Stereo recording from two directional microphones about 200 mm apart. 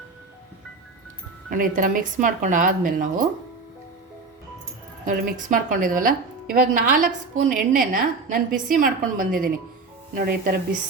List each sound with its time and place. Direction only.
1.5 s speech: 40° right (ahead or behind)
5.0 s a woman's voice: 40° right (ahead or behind)